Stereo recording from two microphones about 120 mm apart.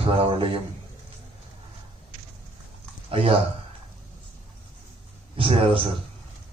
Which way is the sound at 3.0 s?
50° right (ahead or behind).